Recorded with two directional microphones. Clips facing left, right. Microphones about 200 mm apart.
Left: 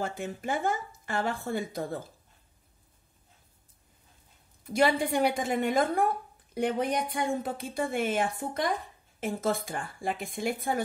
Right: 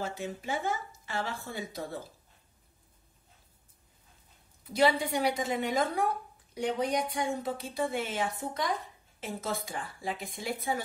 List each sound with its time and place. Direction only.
0.0 s a woman's voice: 50° left (ahead or behind)
4.7 s a woman's voice: 50° left (ahead or behind)